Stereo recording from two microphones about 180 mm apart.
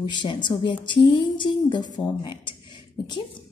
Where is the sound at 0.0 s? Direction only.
25° left (ahead or behind).